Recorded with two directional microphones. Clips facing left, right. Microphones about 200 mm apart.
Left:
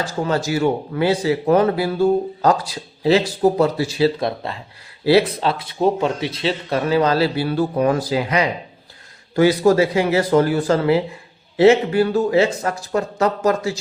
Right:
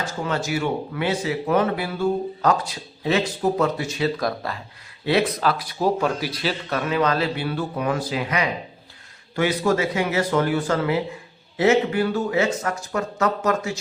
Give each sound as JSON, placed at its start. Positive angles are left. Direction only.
{"t": 0.3, "sound": "speech", "side_deg": 35}